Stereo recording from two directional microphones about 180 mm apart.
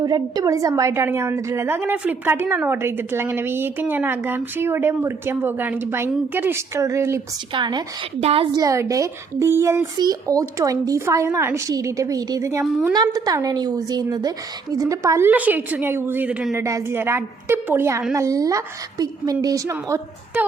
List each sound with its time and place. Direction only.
0.0 s a woman's voice: 20° right (ahead or behind)
8.5 s a woman's voice: 20° right (ahead or behind)